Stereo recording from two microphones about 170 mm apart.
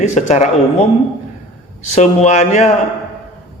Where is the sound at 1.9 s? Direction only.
45° left (ahead or behind).